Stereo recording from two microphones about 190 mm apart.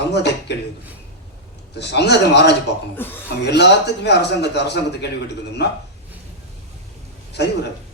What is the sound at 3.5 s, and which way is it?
A man's voice, 60° left (ahead or behind).